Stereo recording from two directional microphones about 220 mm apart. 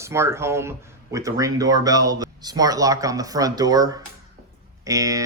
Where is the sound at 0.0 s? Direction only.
10° right (ahead or behind).